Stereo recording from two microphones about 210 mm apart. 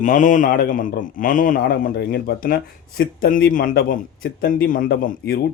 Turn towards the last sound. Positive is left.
turn(degrees=45)  # may be behind; listen again after turning